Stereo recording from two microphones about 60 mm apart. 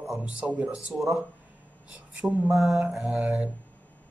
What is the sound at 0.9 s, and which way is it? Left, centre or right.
Mantra, centre.